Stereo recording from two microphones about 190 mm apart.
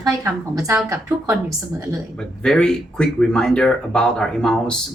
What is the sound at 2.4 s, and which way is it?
Speech, 5° left (ahead or behind).